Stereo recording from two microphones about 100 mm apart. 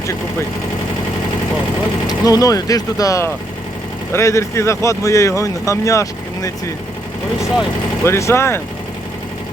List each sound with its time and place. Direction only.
2.0 s speech: 40° left (ahead or behind)
8.0 s speech: 25° left (ahead or behind)